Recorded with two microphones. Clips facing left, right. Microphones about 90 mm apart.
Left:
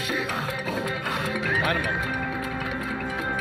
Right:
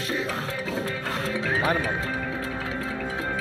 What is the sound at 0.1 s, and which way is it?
Music, 30° right (ahead or behind).